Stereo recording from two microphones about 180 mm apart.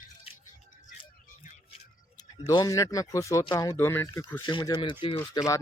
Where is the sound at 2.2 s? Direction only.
25° left (ahead or behind).